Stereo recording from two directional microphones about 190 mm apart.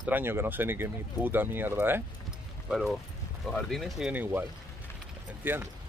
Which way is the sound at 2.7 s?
Centre (ahead or behind).